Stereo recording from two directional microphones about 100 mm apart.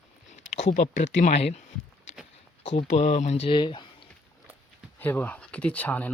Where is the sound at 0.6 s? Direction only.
90° left.